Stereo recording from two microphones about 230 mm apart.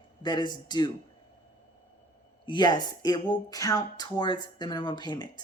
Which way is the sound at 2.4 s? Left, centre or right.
Centre.